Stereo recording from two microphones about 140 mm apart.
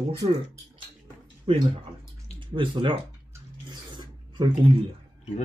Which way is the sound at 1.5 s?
40° right (ahead or behind).